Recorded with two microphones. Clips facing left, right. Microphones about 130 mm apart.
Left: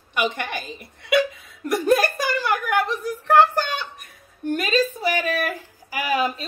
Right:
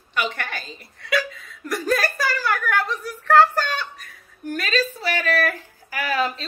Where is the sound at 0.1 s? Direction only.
15° left (ahead or behind).